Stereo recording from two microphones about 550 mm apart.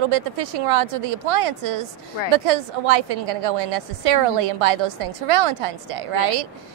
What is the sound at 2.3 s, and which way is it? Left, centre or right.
A woman's voice, right.